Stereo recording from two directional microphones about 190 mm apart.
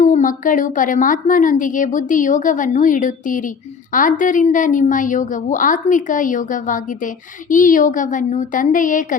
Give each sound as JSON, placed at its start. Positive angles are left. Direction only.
{"t": 0.0, "sound": "a woman's voice", "side_deg": 45}